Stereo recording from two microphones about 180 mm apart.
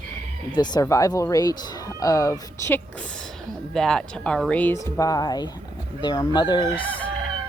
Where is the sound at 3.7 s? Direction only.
5° left (ahead or behind); by 6.9 s 25° left (ahead or behind).